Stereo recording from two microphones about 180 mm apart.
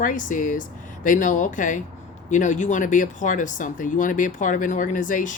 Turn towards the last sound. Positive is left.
turn(degrees=45)  # may be behind; listen again after turning